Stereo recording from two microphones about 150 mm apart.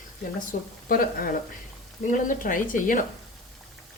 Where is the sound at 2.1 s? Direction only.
60° left (ahead or behind).